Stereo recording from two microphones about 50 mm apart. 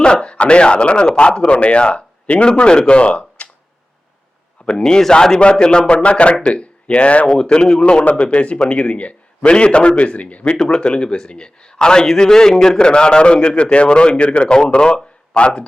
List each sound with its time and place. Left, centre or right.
0.0 s a man's voice: centre
4.6 s a man's voice: centre